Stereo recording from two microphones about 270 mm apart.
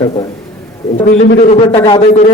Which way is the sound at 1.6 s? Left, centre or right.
Centre.